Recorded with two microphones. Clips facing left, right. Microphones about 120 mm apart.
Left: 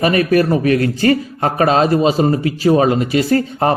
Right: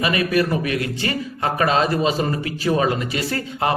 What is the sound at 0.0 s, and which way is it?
A man's voice, 40° left (ahead or behind).